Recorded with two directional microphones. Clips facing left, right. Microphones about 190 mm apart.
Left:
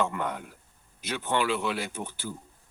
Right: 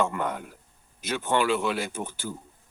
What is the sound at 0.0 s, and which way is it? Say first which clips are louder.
A man's voice: right 2 dB; 45° right (ahead or behind).